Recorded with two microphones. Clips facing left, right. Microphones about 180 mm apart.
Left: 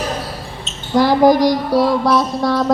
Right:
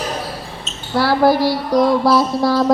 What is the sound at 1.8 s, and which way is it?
Mantra, centre (ahead or behind).